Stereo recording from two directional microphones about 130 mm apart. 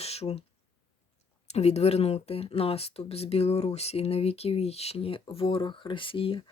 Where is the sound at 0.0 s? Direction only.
50° left (ahead or behind).